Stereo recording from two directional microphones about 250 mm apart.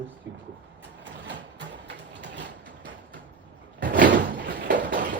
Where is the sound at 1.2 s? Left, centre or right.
Right.